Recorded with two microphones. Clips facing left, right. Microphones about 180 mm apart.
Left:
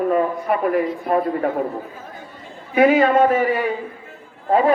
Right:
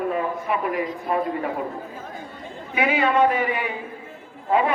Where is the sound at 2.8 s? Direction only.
45° left (ahead or behind).